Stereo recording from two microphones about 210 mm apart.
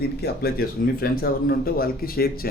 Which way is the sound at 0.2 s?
45° left (ahead or behind).